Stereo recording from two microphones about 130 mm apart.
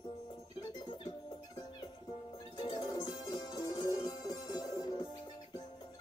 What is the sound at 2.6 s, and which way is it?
Music, 35° left (ahead or behind).